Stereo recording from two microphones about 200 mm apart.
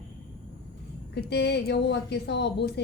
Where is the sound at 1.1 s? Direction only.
55° left (ahead or behind).